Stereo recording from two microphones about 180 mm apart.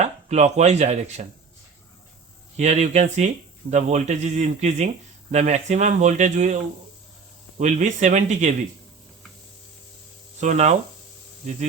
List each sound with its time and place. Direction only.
0.0 s speech: 40° right (ahead or behind)
2.6 s speech: 40° right (ahead or behind)
7.6 s speech: 40° right (ahead or behind)
10.4 s speech: 40° right (ahead or behind)